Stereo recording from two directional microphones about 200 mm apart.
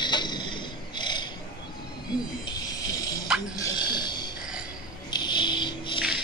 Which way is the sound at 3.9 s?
20° left (ahead or behind).